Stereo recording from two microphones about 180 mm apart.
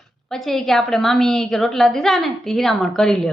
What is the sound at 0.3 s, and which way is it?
A woman's voice, centre (ahead or behind).